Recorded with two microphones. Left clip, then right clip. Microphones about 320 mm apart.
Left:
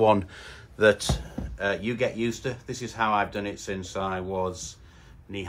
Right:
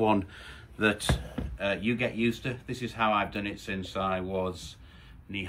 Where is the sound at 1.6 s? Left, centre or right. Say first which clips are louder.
Left 3 dB; centre.